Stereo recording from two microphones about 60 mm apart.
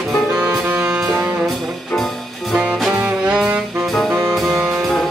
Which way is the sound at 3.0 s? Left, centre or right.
Centre.